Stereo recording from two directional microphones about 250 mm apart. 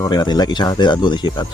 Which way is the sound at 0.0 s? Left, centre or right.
Centre.